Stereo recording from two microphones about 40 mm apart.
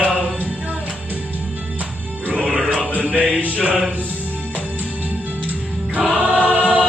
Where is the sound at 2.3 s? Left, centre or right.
Right.